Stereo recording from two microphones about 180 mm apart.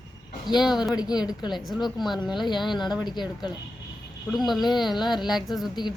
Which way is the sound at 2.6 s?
25° left (ahead or behind).